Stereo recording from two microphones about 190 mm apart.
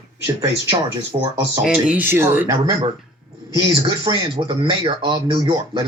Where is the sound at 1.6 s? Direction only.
5° right (ahead or behind).